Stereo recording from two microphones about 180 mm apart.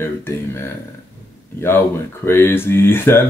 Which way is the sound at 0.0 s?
15° left (ahead or behind).